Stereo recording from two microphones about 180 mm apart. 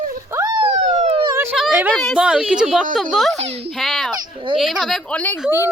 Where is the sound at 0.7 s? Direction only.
40° right (ahead or behind).